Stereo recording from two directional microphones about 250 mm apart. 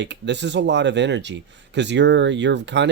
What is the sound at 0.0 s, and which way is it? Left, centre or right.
Speech, right.